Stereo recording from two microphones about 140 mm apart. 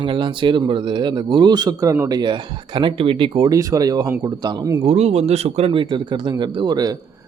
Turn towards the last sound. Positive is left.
turn(degrees=-30)  # may be behind; listen again after turning